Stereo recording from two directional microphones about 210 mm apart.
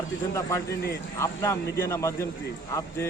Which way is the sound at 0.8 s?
50° left (ahead or behind).